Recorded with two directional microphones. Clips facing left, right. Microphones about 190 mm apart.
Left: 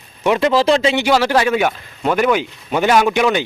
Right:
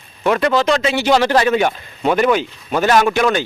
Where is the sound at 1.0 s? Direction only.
10° left (ahead or behind).